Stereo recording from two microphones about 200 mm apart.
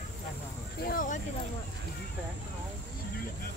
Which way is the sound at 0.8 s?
40° left (ahead or behind).